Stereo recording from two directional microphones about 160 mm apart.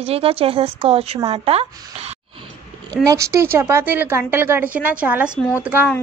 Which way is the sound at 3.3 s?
15° right (ahead or behind).